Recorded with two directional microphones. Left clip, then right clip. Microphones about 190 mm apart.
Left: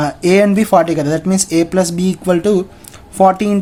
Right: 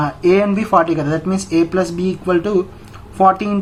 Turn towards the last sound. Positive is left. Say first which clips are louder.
# left 2 dB
turn(degrees=40)  # may be behind; listen again after turning